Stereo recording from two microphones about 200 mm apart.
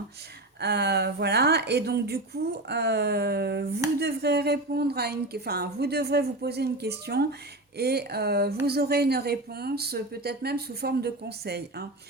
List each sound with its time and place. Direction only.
0.6 s a woman's voice: 55° right (ahead or behind)